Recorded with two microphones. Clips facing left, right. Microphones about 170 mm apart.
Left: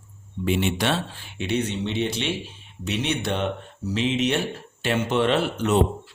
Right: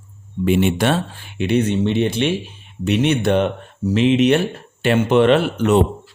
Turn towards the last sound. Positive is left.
turn(degrees=-65)  # may be behind; listen again after turning